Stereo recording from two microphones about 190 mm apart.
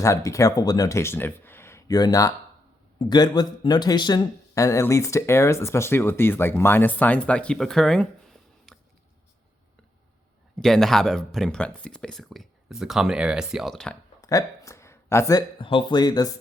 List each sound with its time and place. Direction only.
0.0 s speech: 15° left (ahead or behind)
10.6 s speech: centre (ahead or behind)
14.2 s speech: 15° left (ahead or behind)